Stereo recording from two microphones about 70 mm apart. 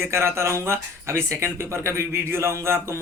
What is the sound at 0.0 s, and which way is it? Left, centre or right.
A man's voice, right.